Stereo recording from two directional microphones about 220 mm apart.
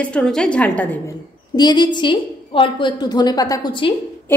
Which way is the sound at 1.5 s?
20° left (ahead or behind).